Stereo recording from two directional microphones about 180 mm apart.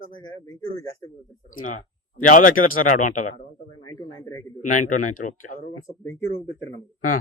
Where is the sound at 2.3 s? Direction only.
50° left (ahead or behind).